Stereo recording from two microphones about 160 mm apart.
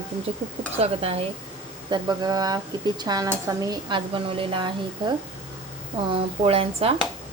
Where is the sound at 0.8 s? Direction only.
40° right (ahead or behind).